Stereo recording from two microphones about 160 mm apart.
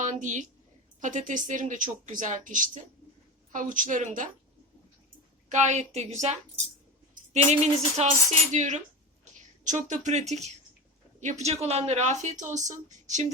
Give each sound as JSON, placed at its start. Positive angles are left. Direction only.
{"t": 0.0, "sound": "a woman's voice", "side_deg": -50}
{"t": 5.5, "sound": "speech", "side_deg": -50}